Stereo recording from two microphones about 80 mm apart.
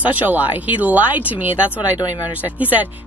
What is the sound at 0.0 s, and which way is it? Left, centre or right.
Speech, right.